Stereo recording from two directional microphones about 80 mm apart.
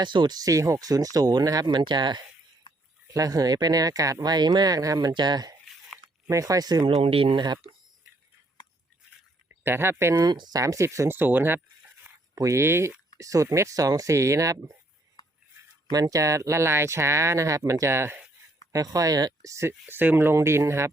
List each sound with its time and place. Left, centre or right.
0.0 s speech: right
0.3 s speech: right
1.6 s speech: right
3.1 s speech: right
6.2 s speech: right
7.3 s speech: right
9.6 s speech: right
10.2 s speech: right
10.6 s speech: right
11.1 s speech: right
12.3 s speech: right
15.9 s speech: right
18.7 s speech: right
19.9 s speech: right